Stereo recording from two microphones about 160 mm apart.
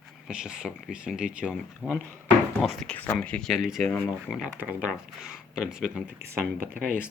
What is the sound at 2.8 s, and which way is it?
Speech, 10° left (ahead or behind).